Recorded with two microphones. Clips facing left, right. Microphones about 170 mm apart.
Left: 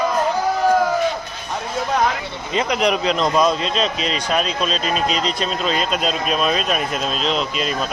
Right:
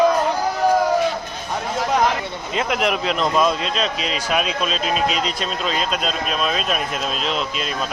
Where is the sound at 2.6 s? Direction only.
Centre (ahead or behind).